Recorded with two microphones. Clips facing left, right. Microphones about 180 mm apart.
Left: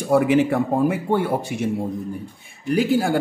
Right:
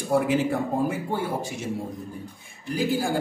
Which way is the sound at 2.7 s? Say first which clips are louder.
Left 6 dB; 70° left (ahead or behind).